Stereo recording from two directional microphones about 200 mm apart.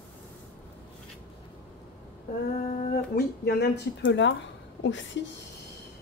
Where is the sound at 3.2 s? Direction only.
55° left (ahead or behind).